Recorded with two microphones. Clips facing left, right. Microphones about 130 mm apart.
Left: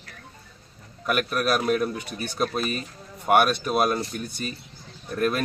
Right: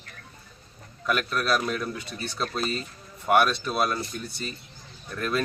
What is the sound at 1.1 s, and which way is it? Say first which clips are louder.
Speech: left 2 dB; 10° left (ahead or behind).